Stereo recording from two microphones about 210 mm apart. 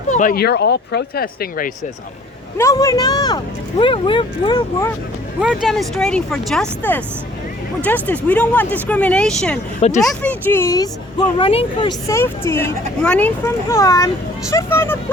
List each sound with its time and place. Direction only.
0.1 s speech: 40° left (ahead or behind)
2.6 s speech: 15° left (ahead or behind)
5.4 s speech: 5° right (ahead or behind); by 14.9 s 10° left (ahead or behind)